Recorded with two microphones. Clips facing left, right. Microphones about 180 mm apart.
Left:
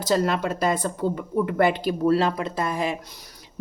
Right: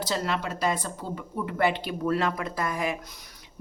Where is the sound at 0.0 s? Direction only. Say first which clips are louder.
Left 7 dB; 50° left (ahead or behind).